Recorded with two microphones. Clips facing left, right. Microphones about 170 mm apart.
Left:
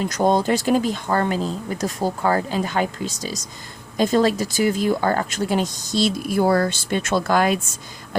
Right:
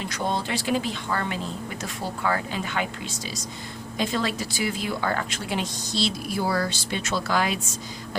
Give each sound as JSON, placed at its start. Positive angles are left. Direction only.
{"t": 0.0, "sound": "speech", "side_deg": 45}